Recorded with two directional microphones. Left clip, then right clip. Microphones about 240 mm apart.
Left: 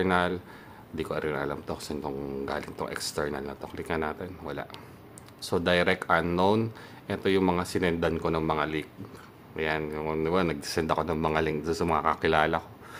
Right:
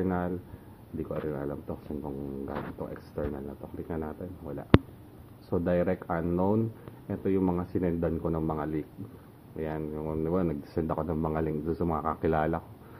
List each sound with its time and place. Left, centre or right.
0.0 s speech: centre
5.7 s speech: centre
9.6 s speech: centre